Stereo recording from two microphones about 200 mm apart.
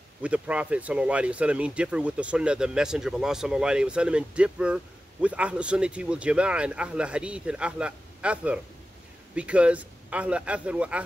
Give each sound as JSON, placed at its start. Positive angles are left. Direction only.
{"t": 0.2, "sound": "a man's voice", "side_deg": -5}